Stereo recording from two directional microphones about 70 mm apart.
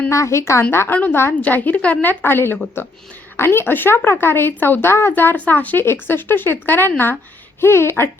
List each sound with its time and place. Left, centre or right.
0.1 s a woman's voice: left
1.4 s a woman's voice: left